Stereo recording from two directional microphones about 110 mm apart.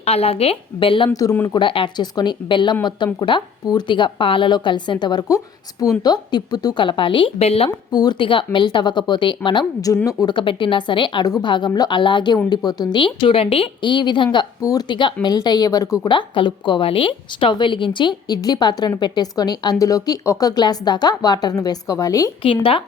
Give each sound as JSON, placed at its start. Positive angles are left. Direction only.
{"t": 0.0, "sound": "a woman's voice", "side_deg": 70}
{"t": 1.1, "sound": "speech", "side_deg": 35}
{"t": 1.5, "sound": "speech", "side_deg": 50}
{"t": 7.3, "sound": "speech", "side_deg": 65}
{"t": 7.9, "sound": "speech", "side_deg": 40}
{"t": 13.8, "sound": "speech", "side_deg": 45}
{"t": 14.6, "sound": "speech", "side_deg": 35}
{"t": 18.3, "sound": "speech", "side_deg": 35}
{"t": 22.4, "sound": "a woman's voice", "side_deg": 55}